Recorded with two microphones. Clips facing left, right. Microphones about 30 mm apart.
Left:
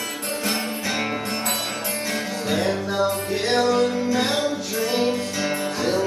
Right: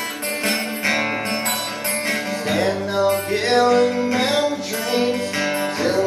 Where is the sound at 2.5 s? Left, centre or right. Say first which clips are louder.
Right 2 dB; centre.